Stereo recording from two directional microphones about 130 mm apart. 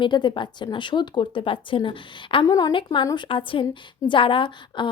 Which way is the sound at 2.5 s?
30° left (ahead or behind).